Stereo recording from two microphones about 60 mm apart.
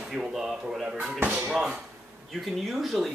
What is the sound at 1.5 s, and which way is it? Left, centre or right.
Speech, centre.